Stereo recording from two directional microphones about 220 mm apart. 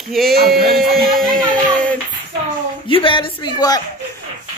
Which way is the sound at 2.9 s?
25° left (ahead or behind).